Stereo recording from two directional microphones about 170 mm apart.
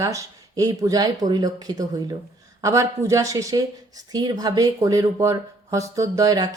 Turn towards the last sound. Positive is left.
turn(degrees=-20)  # may be behind; listen again after turning